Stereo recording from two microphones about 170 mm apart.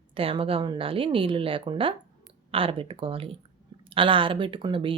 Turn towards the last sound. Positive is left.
turn(degrees=-30)  # may be behind; listen again after turning